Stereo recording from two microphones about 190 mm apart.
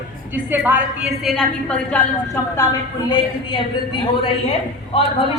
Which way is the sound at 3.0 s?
25° left (ahead or behind).